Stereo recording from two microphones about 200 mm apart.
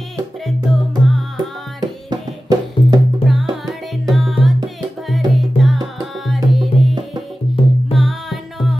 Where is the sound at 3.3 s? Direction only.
Centre (ahead or behind).